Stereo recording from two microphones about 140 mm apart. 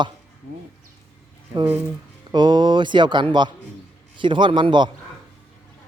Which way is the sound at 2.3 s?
35° right (ahead or behind).